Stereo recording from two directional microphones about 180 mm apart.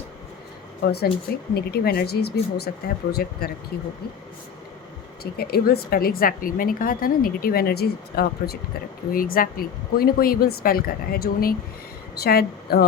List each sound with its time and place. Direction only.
0.8 s a woman's voice: 60° left (ahead or behind)
5.2 s a woman's voice: 60° left (ahead or behind)